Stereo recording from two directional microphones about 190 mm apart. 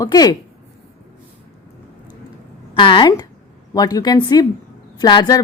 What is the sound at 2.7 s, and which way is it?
Speech, 25° left (ahead or behind).